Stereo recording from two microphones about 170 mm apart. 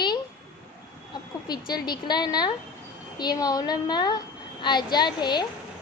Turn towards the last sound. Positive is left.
turn(degrees=25)  # may be behind; listen again after turning